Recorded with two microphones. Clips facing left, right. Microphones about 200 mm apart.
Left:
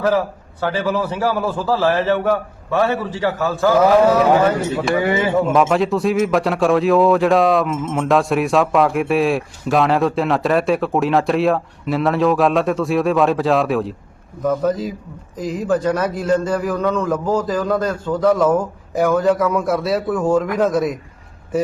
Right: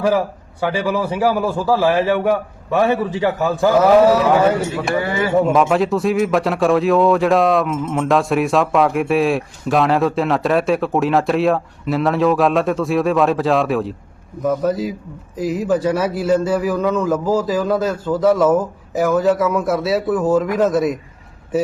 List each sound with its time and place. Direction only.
0.6 s a man's voice: 15° right (ahead or behind)
4.9 s speech: 15° left (ahead or behind)
5.5 s a man's voice: centre (ahead or behind)